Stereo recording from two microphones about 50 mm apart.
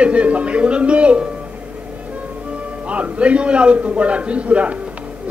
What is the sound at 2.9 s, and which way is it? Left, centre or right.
A man's voice, right.